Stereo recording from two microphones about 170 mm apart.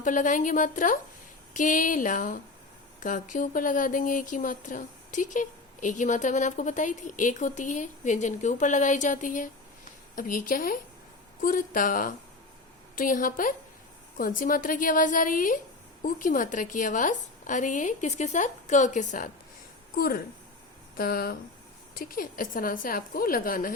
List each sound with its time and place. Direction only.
0.0 s a woman's voice: 50° left (ahead or behind)
20.0 s a woman's voice: 60° left (ahead or behind)